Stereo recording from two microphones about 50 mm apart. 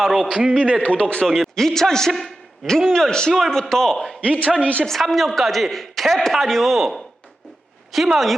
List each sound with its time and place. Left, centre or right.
0.0 s a man's voice: centre
0.8 s a woman's voice: left
1.0 s a man's voice: centre
4.2 s a man's voice: right
4.6 s a woman's voice: left
5.0 s a man's voice: centre